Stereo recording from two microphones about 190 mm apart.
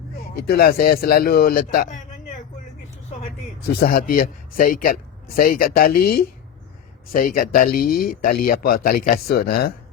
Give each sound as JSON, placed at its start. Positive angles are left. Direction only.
{"t": 0.3, "sound": "speech", "side_deg": 55}
{"t": 3.8, "sound": "speech", "side_deg": 45}